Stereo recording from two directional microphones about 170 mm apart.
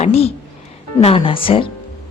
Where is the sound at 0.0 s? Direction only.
35° left (ahead or behind).